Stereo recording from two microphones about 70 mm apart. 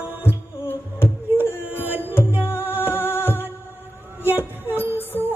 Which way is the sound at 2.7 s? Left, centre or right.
Left.